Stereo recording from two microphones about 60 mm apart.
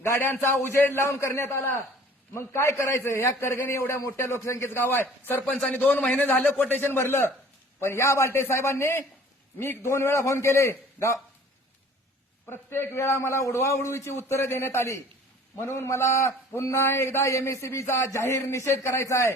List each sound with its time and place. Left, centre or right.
0.0 s a man's voice: left
1.3 s a man's voice: left
4.0 s a man's voice: left
5.6 s a man's voice: left
12.5 s a man's voice: left